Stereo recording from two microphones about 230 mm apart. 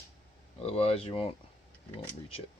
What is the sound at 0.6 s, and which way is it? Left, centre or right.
Speech, left.